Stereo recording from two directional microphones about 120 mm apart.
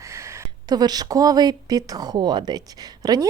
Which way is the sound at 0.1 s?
25° right (ahead or behind).